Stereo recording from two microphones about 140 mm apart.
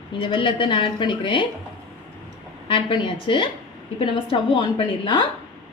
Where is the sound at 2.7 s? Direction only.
35° left (ahead or behind).